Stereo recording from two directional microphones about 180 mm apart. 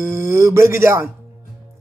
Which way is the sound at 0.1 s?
15° right (ahead or behind).